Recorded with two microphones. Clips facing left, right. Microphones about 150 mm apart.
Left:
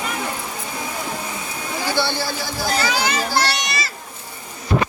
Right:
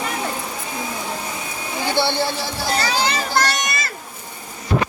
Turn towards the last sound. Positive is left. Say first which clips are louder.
# right 1 dB
turn(degrees=-50)  # may be behind; listen again after turning